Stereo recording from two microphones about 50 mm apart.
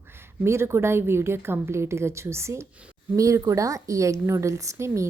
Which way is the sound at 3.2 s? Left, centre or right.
Right.